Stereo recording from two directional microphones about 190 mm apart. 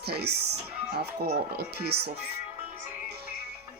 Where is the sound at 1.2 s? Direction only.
50° right (ahead or behind).